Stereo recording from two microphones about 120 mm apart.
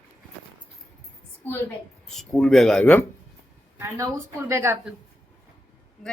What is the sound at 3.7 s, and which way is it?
A woman's voice, 25° right (ahead or behind).